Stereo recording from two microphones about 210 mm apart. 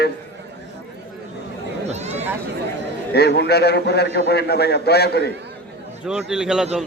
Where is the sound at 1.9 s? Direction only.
30° right (ahead or behind).